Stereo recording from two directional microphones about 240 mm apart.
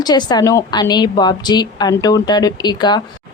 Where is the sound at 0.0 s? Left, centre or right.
Centre.